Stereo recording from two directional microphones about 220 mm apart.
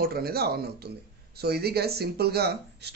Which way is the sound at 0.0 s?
45° right (ahead or behind).